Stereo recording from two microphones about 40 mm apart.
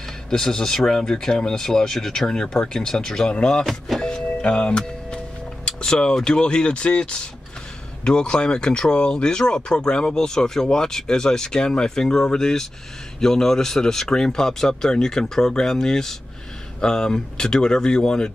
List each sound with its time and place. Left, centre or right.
0.3 s speech: centre
4.0 s vehicle: left
5.7 s speech: left